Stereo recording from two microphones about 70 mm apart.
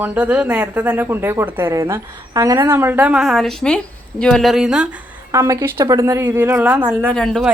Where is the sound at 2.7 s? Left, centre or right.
Right.